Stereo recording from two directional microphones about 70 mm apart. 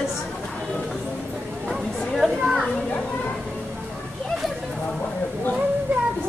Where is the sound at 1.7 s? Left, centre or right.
Centre.